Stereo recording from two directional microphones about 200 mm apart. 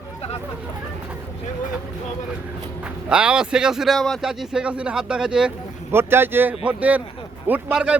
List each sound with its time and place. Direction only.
3.1 s speech: 5° right (ahead or behind)